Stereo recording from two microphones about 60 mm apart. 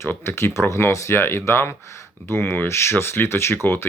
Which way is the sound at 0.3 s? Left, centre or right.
Left.